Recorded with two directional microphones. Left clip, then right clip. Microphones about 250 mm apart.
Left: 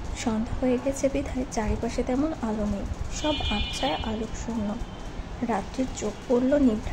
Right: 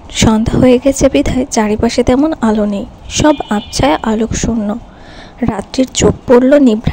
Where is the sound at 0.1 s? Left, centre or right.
Right.